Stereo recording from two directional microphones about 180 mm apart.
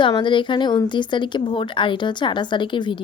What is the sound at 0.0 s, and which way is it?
A woman's voice, 25° left (ahead or behind).